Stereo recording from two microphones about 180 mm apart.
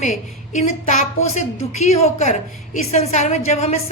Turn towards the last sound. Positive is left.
turn(degrees=40)  # may be behind; listen again after turning